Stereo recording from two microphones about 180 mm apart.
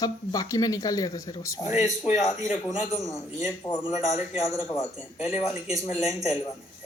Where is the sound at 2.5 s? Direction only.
40° left (ahead or behind).